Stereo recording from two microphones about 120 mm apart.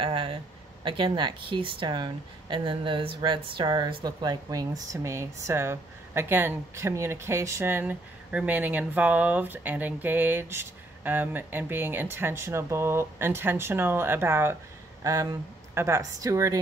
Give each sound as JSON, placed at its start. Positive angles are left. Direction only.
{"t": 0.0, "sound": "speech", "side_deg": -50}
{"t": 15.0, "sound": "speech", "side_deg": -30}